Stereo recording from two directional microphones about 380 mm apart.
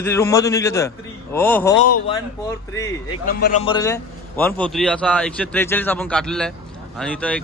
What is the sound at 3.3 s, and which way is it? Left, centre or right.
Speech, left.